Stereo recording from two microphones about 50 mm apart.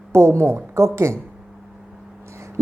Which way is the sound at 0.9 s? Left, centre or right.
Right.